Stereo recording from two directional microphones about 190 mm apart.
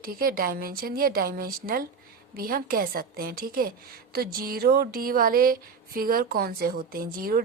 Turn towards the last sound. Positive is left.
turn(degrees=-50)  # may be behind; listen again after turning